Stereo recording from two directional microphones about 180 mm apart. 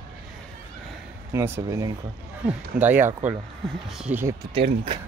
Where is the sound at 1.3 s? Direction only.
15° right (ahead or behind).